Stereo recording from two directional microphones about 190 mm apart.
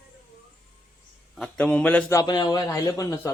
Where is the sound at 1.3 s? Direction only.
5° left (ahead or behind).